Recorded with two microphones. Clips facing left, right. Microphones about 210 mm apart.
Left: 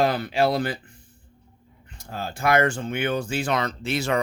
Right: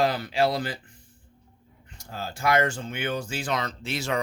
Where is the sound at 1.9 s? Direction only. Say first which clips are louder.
Left 3 dB; 55° left (ahead or behind).